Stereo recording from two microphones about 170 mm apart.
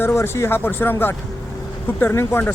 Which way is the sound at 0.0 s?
15° left (ahead or behind).